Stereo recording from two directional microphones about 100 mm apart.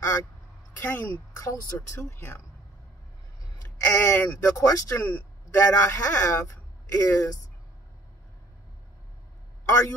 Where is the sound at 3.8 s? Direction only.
30° left (ahead or behind).